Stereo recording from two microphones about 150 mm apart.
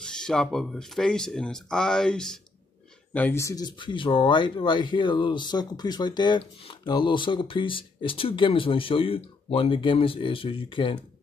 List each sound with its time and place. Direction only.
0.0 s speech: 5° left (ahead or behind); by 11.0 s 35° left (ahead or behind)